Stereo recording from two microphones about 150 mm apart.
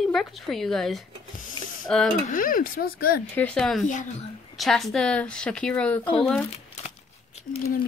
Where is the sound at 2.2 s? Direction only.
65° left (ahead or behind); by 3.2 s 85° left.